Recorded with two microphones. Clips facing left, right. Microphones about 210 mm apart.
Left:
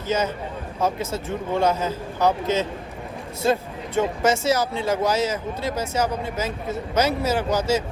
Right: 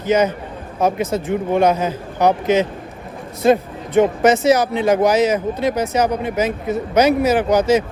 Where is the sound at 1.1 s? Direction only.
15° right (ahead or behind).